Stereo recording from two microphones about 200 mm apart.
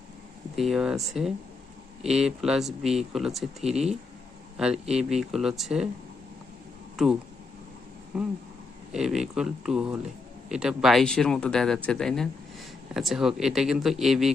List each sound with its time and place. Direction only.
0.5 s speech: centre (ahead or behind)
3.6 s speech: 30° right (ahead or behind)
4.5 s speech: 5° right (ahead or behind)
6.9 s speech: centre (ahead or behind)
8.9 s speech: centre (ahead or behind)